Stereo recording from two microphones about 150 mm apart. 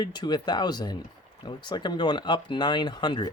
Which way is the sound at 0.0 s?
30° left (ahead or behind).